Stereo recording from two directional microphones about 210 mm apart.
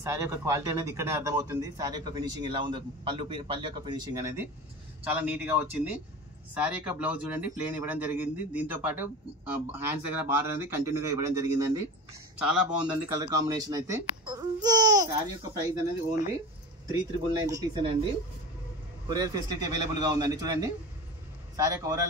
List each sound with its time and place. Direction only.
0.0 s speech: 15° right (ahead or behind)
12.4 s speech: 5° right (ahead or behind)
13.5 s speech: 20° right (ahead or behind)
19.0 s speech: 20° right (ahead or behind)